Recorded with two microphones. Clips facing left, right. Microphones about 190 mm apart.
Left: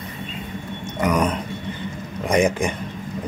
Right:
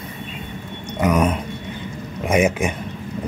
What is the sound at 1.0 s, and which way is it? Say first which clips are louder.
Speech: right 2 dB; 10° right (ahead or behind).